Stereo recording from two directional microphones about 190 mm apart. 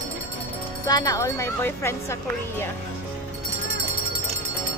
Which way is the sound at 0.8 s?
20° left (ahead or behind).